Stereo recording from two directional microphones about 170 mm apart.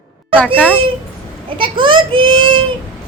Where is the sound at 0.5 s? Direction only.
10° left (ahead or behind).